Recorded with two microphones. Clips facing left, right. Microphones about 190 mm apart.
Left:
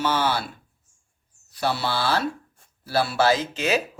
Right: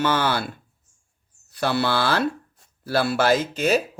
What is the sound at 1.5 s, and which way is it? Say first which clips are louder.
Speech: right 3 dB; 55° right (ahead or behind).